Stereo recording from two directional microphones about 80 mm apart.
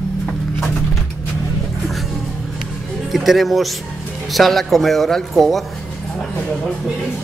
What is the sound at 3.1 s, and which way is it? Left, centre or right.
Speech, centre.